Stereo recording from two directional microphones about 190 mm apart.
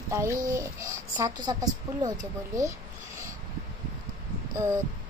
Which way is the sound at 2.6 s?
15° right (ahead or behind).